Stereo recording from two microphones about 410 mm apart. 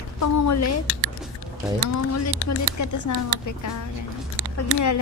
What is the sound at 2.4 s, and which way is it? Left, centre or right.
A woman's voice, left.